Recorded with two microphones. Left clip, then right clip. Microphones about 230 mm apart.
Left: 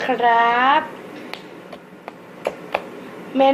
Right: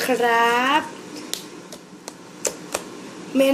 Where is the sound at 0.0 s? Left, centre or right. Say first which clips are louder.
Left 2 dB; centre.